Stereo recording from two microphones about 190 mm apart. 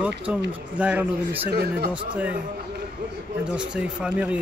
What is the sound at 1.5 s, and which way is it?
Speech, 55° right (ahead or behind).